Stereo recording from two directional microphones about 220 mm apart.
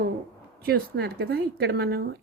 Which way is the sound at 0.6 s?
45° right (ahead or behind).